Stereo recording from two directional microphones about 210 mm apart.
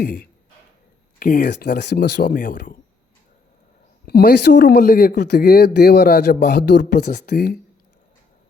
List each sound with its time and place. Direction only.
0.0 s speech: 45° left (ahead or behind)
4.0 s speech: 50° left (ahead or behind)